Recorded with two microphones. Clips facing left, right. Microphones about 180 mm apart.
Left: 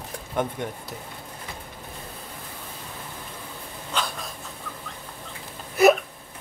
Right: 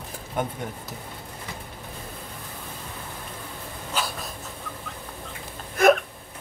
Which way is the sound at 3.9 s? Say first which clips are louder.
Even; 5° right (ahead or behind).